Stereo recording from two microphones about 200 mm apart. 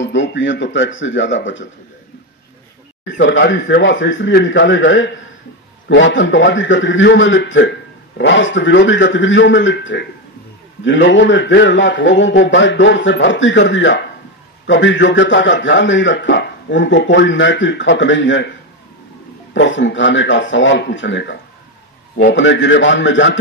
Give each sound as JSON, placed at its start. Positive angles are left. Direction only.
{"t": 0.0, "sound": "a man's voice", "side_deg": 65}
{"t": 3.2, "sound": "a man's voice", "side_deg": 60}
{"t": 19.5, "sound": "a man's voice", "side_deg": 65}